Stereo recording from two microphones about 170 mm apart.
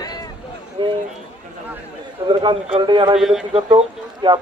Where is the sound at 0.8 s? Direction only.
25° right (ahead or behind).